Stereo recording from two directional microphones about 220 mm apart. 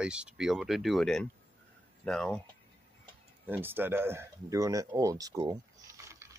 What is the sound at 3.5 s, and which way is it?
Speech, 10° right (ahead or behind).